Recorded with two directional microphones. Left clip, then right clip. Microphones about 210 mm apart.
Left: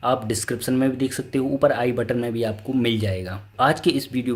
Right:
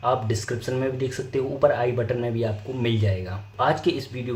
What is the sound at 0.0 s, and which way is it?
Speech, 50° left (ahead or behind).